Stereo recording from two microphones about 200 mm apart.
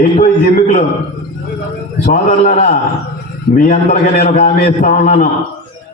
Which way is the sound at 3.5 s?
45° left (ahead or behind).